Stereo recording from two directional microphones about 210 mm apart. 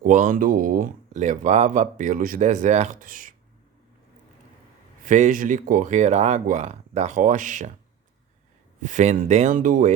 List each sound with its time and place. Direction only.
0.0 s speech: 40° right (ahead or behind)
5.0 s speech: 35° right (ahead or behind)
8.8 s speech: 35° right (ahead or behind)